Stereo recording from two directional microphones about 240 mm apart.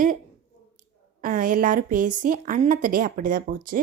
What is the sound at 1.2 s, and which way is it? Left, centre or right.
Speech, right.